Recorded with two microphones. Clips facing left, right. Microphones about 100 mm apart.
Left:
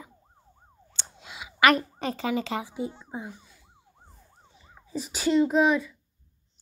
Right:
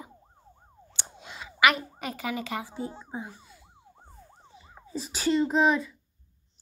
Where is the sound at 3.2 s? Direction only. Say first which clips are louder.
Left 1 dB; 5° right (ahead or behind).